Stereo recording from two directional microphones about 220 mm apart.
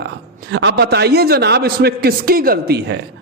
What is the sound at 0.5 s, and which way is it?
A man's voice, 50° right (ahead or behind).